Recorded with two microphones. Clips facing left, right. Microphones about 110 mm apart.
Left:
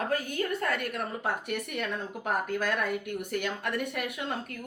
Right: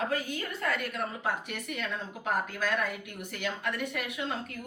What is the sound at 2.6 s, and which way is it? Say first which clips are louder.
A woman's voice: left 2 dB; 50° left (ahead or behind).